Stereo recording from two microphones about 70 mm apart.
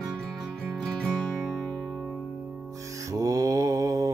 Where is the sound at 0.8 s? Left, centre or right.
Centre.